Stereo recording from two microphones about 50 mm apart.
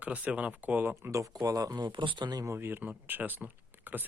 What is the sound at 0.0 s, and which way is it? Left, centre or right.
Speech, right.